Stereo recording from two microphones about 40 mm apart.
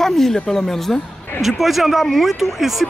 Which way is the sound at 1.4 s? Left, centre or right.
Centre.